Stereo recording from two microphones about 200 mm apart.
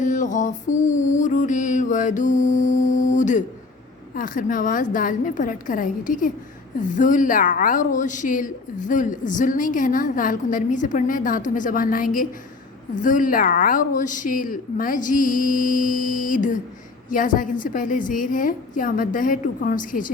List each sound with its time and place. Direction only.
0.0 s a woman's voice: 40° left (ahead or behind)